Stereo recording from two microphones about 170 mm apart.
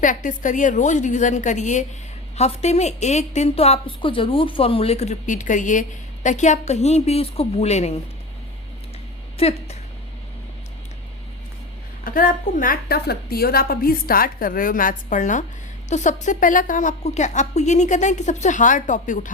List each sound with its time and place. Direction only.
0.0 s a woman's voice: 50° left (ahead or behind)
9.4 s a woman's voice: 35° left (ahead or behind)
12.0 s a woman's voice: 55° left (ahead or behind)